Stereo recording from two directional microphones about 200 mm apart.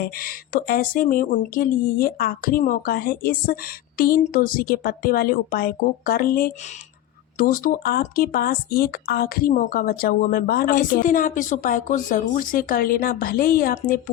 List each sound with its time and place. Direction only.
0.0 s speech: 45° left (ahead or behind)